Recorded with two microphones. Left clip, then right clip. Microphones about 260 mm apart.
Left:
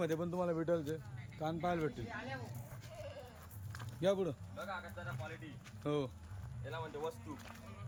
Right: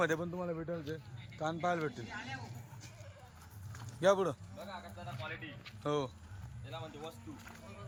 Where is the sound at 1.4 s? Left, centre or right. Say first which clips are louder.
Right 3 dB; centre.